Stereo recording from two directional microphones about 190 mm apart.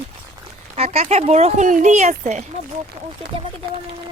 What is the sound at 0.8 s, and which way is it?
Speech, 35° right (ahead or behind).